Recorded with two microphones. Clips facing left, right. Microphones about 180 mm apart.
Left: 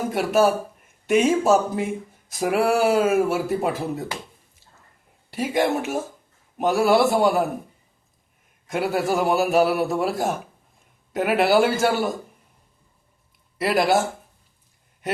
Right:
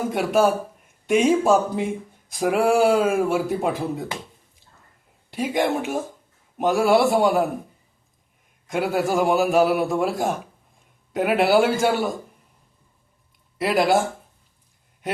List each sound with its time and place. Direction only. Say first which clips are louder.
0.0 s a man's voice: even; 5° left (ahead or behind)
5.3 s a man's voice: even; 5° left (ahead or behind)
8.7 s a man's voice: right 1 dB; centre (ahead or behind)
13.6 s a man's voice: right 1 dB; centre (ahead or behind)